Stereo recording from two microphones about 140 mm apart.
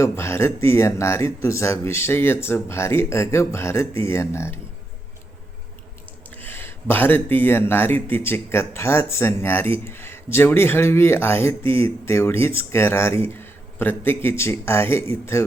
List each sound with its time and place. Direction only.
0.0 s speech: 20° left (ahead or behind)
6.3 s speech: 15° left (ahead or behind)